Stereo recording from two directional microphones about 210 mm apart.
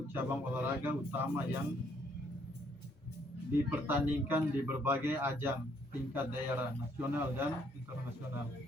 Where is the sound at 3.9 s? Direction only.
10° right (ahead or behind).